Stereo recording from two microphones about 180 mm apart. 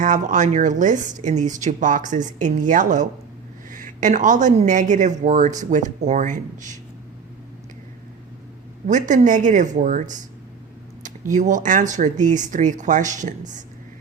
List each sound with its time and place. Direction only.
0.0 s a woman's voice: 45° right (ahead or behind)
8.9 s a woman's voice: 45° right (ahead or behind)